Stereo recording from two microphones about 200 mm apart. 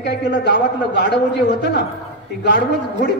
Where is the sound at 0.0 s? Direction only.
55° left (ahead or behind).